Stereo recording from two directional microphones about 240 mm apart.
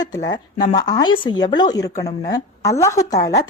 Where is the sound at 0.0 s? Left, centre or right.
Centre.